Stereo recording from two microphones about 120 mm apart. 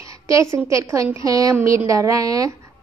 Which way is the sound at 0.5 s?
25° right (ahead or behind).